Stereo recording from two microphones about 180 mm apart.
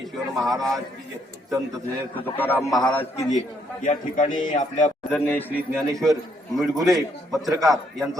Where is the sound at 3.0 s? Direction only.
40° left (ahead or behind).